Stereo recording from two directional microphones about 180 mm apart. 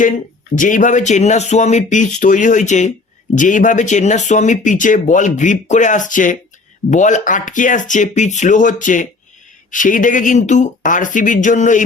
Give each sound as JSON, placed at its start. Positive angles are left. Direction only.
{"t": 0.5, "sound": "speech", "side_deg": 45}